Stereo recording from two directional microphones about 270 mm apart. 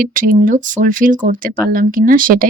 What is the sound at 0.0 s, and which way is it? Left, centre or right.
Speech, right.